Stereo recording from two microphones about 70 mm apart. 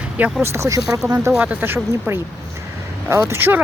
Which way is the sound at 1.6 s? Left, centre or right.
Right.